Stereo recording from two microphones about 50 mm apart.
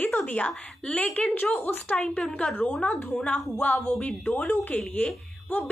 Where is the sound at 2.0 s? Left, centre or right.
Centre.